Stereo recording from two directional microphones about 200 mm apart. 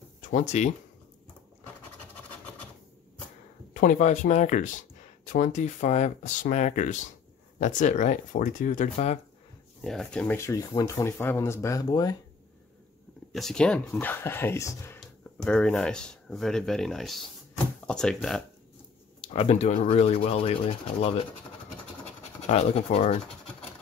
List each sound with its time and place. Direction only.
0.2 s speech: 35° left (ahead or behind)
3.7 s speech: 40° left (ahead or behind)
9.8 s speech: 5° left (ahead or behind); by 12.2 s 20° left (ahead or behind)
13.3 s speech: centre (ahead or behind)
15.0 s speech: 5° left (ahead or behind)
19.2 s speech: 30° left (ahead or behind)
22.5 s speech: 35° left (ahead or behind)